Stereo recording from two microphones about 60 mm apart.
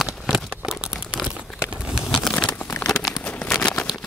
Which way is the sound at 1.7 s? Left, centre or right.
Centre.